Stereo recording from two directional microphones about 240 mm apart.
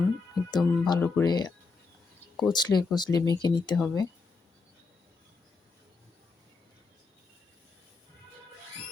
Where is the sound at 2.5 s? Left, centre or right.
Centre.